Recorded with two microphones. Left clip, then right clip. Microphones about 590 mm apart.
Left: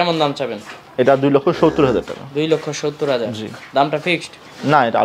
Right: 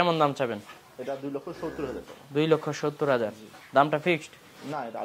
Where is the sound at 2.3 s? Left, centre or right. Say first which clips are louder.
Left 6 dB; right.